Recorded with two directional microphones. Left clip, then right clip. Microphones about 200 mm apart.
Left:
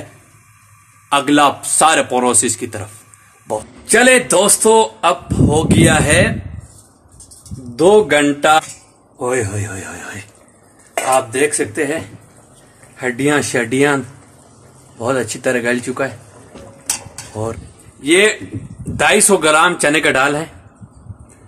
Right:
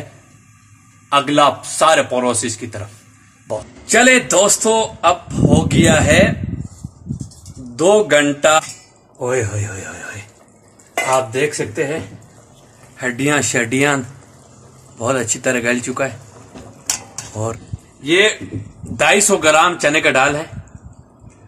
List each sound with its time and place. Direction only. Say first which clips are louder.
1.0 s a man's voice: even; 40° left (ahead or behind)
3.8 s speech: left 1 dB; 20° left (ahead or behind)
7.7 s speech: left 1 dB; 20° left (ahead or behind)
9.2 s speech: left 1 dB; 40° left (ahead or behind)
11.3 s speech: left 2 dB; 50° left (ahead or behind)
12.9 s speech: left 1 dB; 15° left (ahead or behind)
17.3 s speech: left 1 dB; 10° left (ahead or behind)
18.0 s speech: left 1 dB; 45° left (ahead or behind)
18.9 s speech: left 1 dB; 20° left (ahead or behind)